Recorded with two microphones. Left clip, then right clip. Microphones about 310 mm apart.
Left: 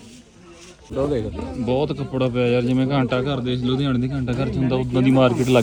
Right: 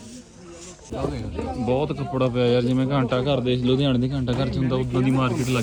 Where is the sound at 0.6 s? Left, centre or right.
Right.